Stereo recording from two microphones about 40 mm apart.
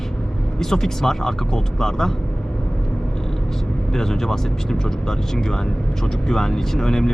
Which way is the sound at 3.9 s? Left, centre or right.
Centre.